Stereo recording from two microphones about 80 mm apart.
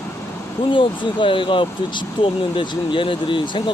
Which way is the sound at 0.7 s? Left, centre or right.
Left.